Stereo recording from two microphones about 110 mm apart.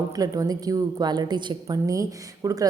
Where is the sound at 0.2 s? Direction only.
35° right (ahead or behind).